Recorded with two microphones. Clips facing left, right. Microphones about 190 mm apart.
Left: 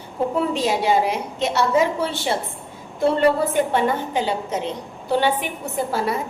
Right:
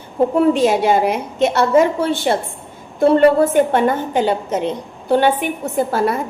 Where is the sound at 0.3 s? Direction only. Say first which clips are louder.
Right 8 dB; 55° right (ahead or behind).